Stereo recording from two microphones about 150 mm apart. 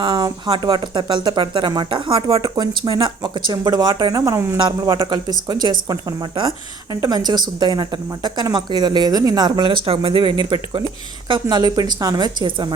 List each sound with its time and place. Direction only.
0.0 s speech: 30° right (ahead or behind)